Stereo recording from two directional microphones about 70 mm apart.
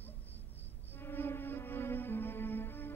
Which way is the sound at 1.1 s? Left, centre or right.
Left.